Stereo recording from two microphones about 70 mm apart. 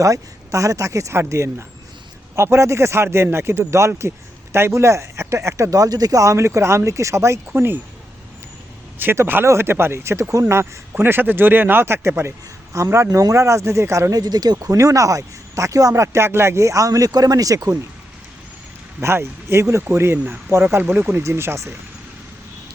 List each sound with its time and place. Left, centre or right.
0.0 s speech: right
7.5 s speech: right
9.1 s speech: right
14.1 s speech: right
14.8 s speech: right
19.0 s speech: right